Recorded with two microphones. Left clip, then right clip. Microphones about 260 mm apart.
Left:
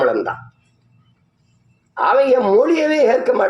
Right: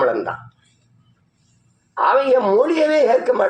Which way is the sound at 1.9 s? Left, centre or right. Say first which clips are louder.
Left 1 dB; left.